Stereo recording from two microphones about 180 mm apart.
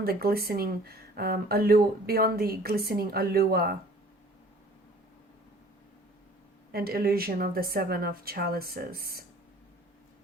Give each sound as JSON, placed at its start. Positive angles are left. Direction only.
{"t": 0.0, "sound": "speech", "side_deg": -55}
{"t": 6.7, "sound": "speech", "side_deg": -55}